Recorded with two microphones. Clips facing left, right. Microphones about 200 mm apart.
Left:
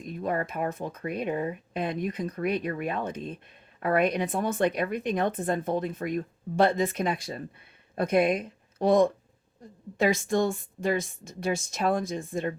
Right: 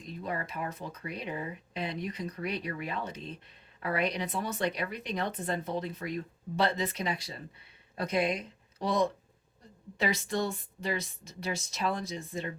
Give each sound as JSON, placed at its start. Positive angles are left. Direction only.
{"t": 0.0, "sound": "speech", "side_deg": 50}